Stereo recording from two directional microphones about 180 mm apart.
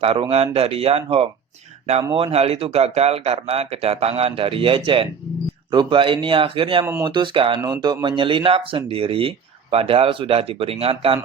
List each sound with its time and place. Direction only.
0.0 s speech: 35° right (ahead or behind)